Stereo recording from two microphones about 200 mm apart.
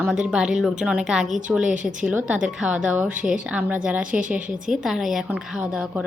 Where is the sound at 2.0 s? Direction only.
5° right (ahead or behind).